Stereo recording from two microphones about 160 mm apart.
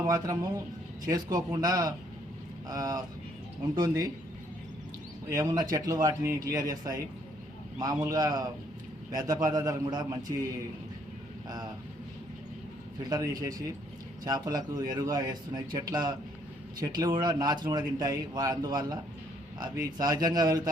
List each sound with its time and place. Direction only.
0.1 s a man's voice: 20° right (ahead or behind)
5.3 s a man's voice: 25° right (ahead or behind)
11.4 s speech: 25° right (ahead or behind)
13.0 s a man's voice: 25° right (ahead or behind)